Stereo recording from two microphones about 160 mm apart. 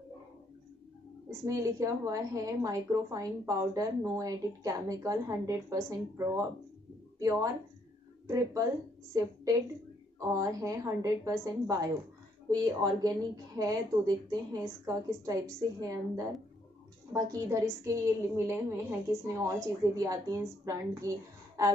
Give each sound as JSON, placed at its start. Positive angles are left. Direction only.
{"t": 1.4, "sound": "a woman's voice", "side_deg": -20}